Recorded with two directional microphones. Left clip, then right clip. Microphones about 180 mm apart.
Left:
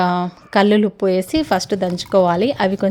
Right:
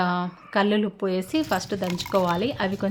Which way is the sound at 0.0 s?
40° left (ahead or behind).